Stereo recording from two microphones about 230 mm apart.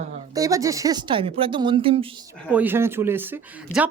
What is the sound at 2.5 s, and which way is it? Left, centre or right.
Speech, centre.